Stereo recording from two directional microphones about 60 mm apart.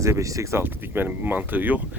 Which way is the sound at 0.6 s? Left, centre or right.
Right.